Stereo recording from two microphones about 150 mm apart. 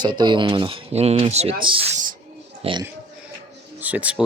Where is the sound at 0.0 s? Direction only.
30° right (ahead or behind).